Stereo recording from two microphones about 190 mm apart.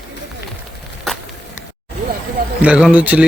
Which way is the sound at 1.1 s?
Centre (ahead or behind).